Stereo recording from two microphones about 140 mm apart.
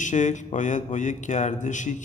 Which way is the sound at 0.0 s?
60° left (ahead or behind).